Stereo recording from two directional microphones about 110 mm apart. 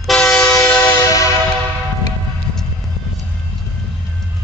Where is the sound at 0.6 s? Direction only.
25° left (ahead or behind).